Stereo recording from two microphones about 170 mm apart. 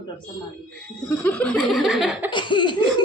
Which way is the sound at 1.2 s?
5° left (ahead or behind).